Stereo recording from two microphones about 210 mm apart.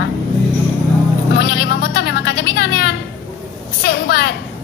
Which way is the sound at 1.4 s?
50° left (ahead or behind).